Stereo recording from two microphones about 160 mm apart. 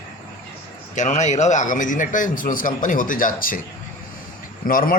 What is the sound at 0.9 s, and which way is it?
Speech, 45° left (ahead or behind).